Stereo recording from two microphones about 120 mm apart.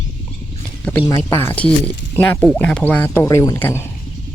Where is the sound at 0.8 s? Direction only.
15° left (ahead or behind).